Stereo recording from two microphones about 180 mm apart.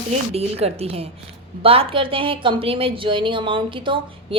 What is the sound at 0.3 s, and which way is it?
A woman's voice, 35° right (ahead or behind).